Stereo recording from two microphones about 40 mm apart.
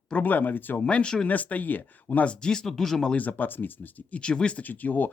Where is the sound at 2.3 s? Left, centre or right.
Left.